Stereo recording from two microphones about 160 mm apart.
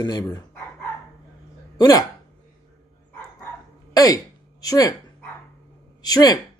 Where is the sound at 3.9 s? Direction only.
20° left (ahead or behind).